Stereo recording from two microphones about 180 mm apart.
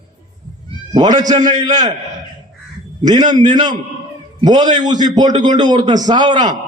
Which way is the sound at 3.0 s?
20° right (ahead or behind).